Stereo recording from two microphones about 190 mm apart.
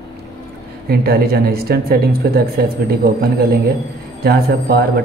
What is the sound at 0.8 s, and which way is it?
Speech, 55° right (ahead or behind).